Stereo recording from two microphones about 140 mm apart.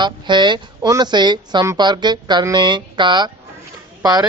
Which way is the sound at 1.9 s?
30° right (ahead or behind).